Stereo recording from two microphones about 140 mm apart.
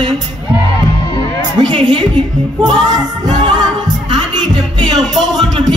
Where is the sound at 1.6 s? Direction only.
35° right (ahead or behind).